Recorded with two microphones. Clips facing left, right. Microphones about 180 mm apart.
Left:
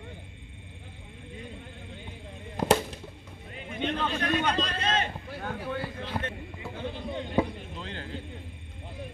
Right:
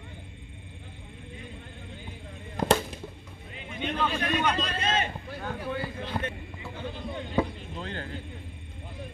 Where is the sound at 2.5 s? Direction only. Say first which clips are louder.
Even; 10° left (ahead or behind).